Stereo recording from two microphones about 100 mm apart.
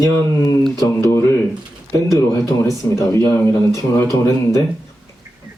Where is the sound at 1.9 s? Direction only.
30° left (ahead or behind).